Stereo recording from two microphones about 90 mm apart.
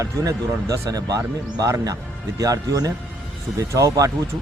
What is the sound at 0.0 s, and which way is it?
Speech, 40° right (ahead or behind).